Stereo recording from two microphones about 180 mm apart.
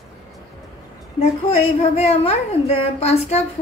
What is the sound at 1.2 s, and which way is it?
A woman's voice, 35° left (ahead or behind).